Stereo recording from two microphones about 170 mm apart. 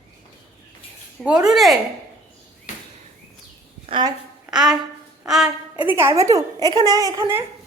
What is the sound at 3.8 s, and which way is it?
Speech, 30° right (ahead or behind).